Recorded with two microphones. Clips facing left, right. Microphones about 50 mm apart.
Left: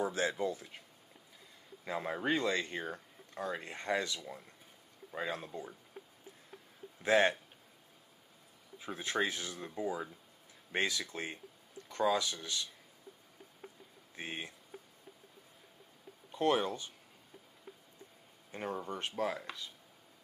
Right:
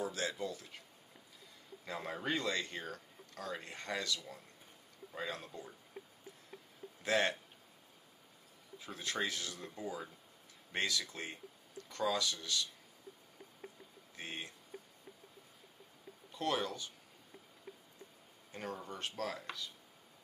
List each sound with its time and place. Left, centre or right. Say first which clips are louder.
0.0 s speech: left 5 dB; left
1.9 s speech: left 5 dB; centre
7.0 s speech: left 5 dB; left
8.7 s speech: left 4 dB; left
14.1 s speech: left 3 dB; centre
16.3 s speech: left 5 dB; left
18.5 s speech: left 5 dB; left